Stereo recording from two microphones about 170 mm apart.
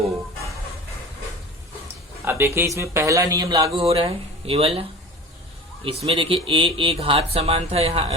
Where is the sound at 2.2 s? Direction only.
15° right (ahead or behind).